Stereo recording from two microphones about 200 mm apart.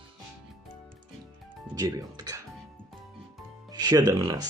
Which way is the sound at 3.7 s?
20° right (ahead or behind).